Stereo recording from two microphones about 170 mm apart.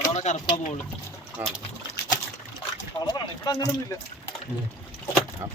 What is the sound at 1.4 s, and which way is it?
Speech, 10° right (ahead or behind).